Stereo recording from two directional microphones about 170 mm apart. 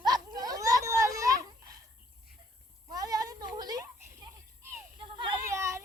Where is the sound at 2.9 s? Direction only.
20° right (ahead or behind).